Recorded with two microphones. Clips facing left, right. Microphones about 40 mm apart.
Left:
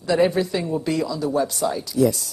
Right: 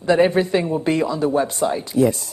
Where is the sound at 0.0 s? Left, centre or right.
Right.